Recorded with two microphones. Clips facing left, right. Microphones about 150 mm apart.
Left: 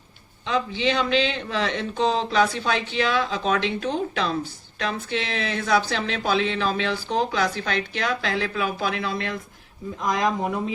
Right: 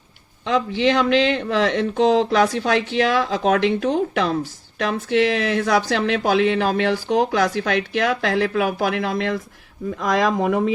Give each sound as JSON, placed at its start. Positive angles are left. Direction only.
{"t": 0.4, "sound": "speech", "side_deg": -75}